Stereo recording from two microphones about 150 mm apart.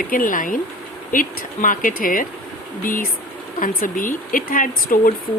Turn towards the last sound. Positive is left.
turn(degrees=65)  # may be behind; listen again after turning